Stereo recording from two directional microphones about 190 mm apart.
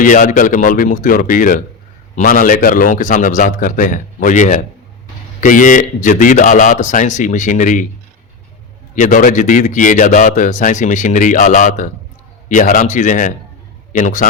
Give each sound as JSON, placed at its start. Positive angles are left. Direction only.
{"t": 0.0, "sound": "a man's voice", "side_deg": 45}
{"t": 9.0, "sound": "a man's voice", "side_deg": 40}